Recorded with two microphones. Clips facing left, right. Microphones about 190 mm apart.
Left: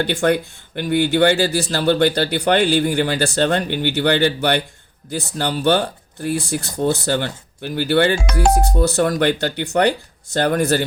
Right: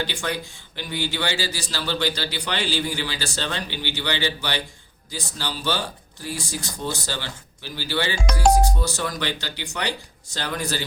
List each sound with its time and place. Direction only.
0.0 s speech: 55° left (ahead or behind)